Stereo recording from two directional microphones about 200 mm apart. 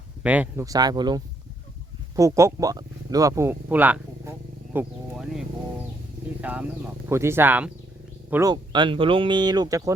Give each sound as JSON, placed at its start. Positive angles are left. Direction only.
{"t": 0.2, "sound": "speech", "side_deg": -5}
{"t": 6.4, "sound": "speech", "side_deg": -5}